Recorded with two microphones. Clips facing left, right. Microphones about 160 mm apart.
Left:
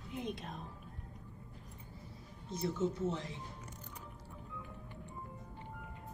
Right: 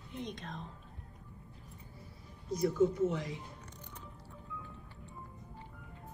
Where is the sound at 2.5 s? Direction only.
30° left (ahead or behind).